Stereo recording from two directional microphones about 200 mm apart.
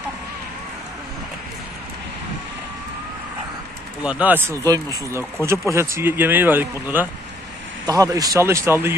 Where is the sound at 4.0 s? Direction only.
5° right (ahead or behind).